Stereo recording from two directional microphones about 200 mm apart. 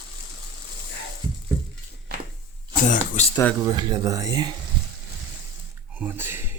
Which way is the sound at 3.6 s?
20° right (ahead or behind).